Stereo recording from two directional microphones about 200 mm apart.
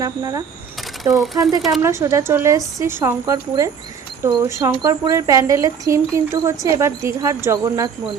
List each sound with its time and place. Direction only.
0.0 s speech: 20° right (ahead or behind)
1.1 s speech: centre (ahead or behind)
1.8 s speech: 15° right (ahead or behind)